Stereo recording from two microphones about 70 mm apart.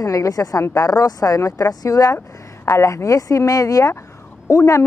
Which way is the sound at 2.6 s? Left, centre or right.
Left.